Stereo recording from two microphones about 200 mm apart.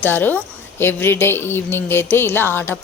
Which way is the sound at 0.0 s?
10° left (ahead or behind).